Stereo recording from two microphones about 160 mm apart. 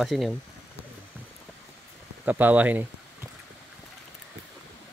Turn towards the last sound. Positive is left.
turn(degrees=-10)  # may be behind; listen again after turning